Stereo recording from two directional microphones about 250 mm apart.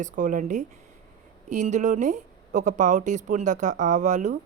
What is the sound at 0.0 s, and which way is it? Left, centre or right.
Speech, right.